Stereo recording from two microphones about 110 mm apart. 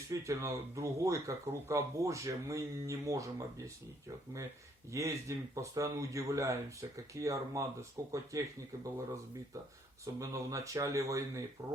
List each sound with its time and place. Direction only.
0.1 s speech: 30° right (ahead or behind)
4.9 s speech: 30° right (ahead or behind)
10.2 s speech: 30° right (ahead or behind)